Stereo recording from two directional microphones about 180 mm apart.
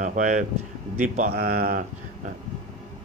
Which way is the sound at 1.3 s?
60° right (ahead or behind).